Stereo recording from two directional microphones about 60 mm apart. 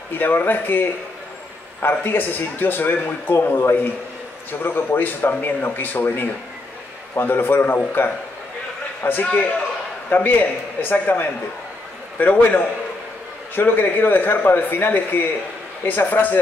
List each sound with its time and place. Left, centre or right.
0.2 s a man's voice: left